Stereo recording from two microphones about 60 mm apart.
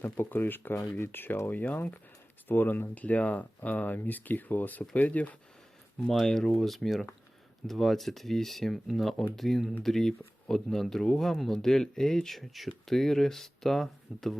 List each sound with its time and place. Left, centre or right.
0.0 s speech: left
6.1 s speech: centre